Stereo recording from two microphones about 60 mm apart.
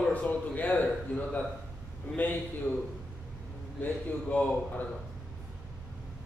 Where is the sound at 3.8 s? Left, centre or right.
Left.